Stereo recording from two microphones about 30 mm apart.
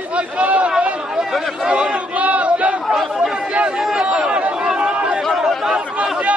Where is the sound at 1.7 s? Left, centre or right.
Right.